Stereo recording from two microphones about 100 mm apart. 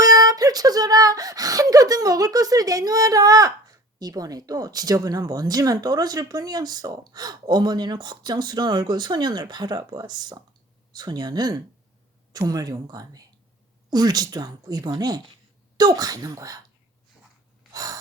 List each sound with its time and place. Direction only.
0.0 s speech: 40° right (ahead or behind)
17.7 s gasp: 35° right (ahead or behind)